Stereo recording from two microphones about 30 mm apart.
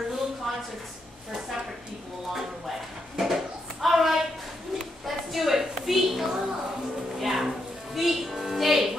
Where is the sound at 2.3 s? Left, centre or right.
Centre.